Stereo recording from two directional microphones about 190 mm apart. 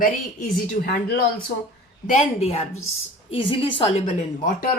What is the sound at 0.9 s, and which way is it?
Speech, 50° left (ahead or behind).